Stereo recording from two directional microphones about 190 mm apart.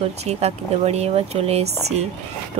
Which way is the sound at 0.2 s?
35° right (ahead or behind).